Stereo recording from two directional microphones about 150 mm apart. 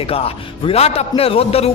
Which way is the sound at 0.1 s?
40° left (ahead or behind).